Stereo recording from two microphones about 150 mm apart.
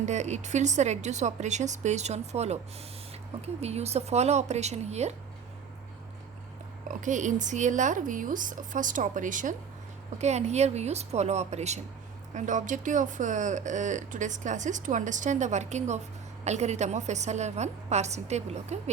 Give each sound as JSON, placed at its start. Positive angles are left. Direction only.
{"t": 0.0, "sound": "a woman's voice", "side_deg": -50}
{"t": 6.8, "sound": "speech", "side_deg": -55}
{"t": 10.2, "sound": "a woman's voice", "side_deg": -50}